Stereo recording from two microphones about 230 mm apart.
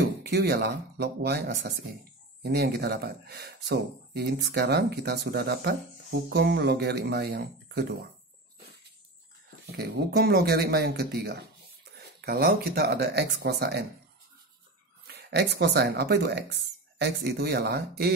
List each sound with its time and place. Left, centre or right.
0.2 s speech: right
9.7 s speech: right
15.2 s speech: right